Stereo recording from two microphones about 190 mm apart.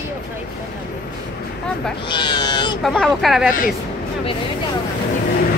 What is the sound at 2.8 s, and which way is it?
Speech, centre (ahead or behind).